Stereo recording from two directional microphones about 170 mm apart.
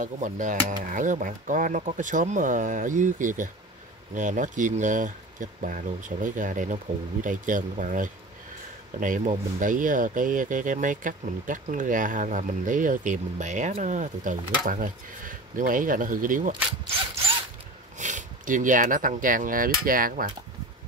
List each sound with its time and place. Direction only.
0.0 s speech: 50° right (ahead or behind)
17.9 s speech: 45° right (ahead or behind)